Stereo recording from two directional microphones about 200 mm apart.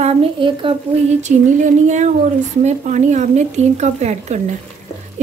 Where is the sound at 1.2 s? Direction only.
35° right (ahead or behind).